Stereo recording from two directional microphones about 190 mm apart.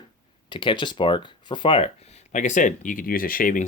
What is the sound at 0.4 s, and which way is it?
Speech, 25° left (ahead or behind).